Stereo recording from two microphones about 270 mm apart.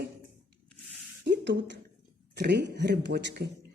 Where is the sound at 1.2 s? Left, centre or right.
Right.